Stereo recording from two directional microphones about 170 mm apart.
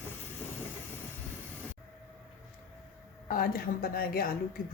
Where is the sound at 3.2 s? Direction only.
55° left (ahead or behind).